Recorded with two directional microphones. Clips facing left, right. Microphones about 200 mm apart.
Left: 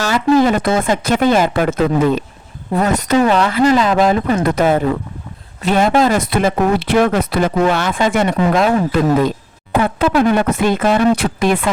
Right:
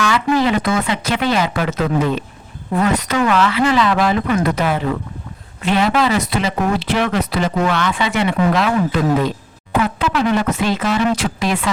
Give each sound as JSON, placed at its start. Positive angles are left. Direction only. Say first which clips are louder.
{"t": 0.0, "sound": "speech", "louder": "left 4 dB", "side_deg": 40}